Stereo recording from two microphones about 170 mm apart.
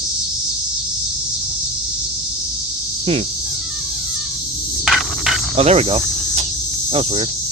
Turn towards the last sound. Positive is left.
turn(degrees=-35)  # may be behind; listen again after turning